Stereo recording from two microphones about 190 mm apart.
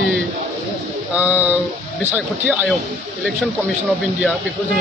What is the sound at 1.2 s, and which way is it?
Speech, 5° right (ahead or behind).